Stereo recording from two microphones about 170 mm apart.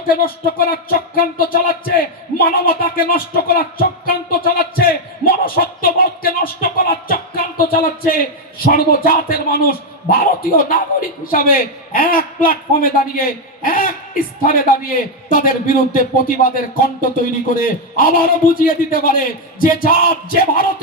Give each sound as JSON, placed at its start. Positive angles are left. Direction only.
{"t": 0.1, "sound": "a man's voice", "side_deg": 60}
{"t": 6.4, "sound": "music", "side_deg": 60}
{"t": 8.6, "sound": "a man's voice", "side_deg": 60}